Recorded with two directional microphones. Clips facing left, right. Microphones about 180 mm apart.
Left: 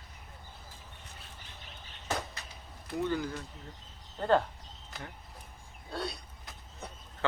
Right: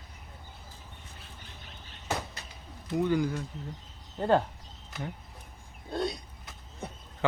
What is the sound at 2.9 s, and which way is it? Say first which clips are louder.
Speech: right 5 dB; 15° right (ahead or behind).